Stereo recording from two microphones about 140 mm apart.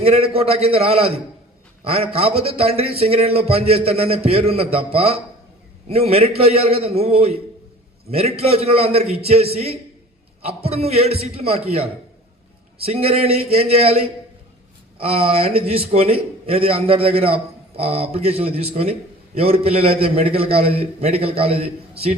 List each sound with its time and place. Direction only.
0.0 s a man's voice: 45° right (ahead or behind)